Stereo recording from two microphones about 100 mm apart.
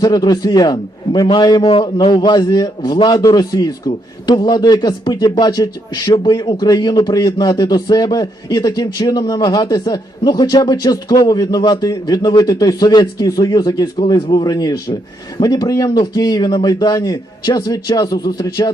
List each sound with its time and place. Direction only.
0.0 s speech: 40° left (ahead or behind)
1.7 s speech: 60° left (ahead or behind); by 18.7 s 40° left (ahead or behind)